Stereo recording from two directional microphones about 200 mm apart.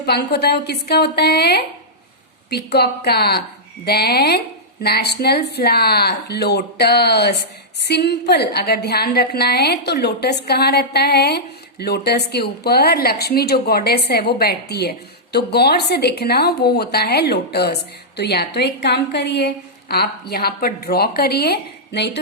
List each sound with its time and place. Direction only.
0.0 s a woman's voice: 55° left (ahead or behind)
2.7 s a woman's voice: 55° left (ahead or behind)